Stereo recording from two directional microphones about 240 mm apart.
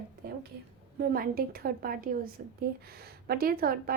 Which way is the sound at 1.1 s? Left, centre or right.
Right.